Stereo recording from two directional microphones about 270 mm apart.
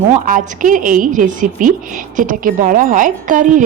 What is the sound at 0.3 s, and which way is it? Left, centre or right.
Speech, right.